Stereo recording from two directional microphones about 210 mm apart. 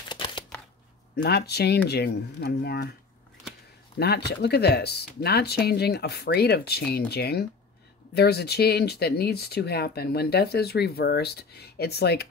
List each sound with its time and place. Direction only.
0.1 s a sound: 20° left (ahead or behind)
1.1 s speech: 50° left (ahead or behind)
4.0 s speech: 50° left (ahead or behind)